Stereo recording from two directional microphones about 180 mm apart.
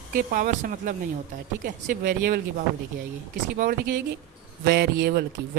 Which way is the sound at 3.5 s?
50° right (ahead or behind).